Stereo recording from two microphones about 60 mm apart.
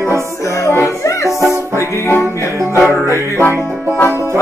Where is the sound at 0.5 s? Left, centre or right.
Left.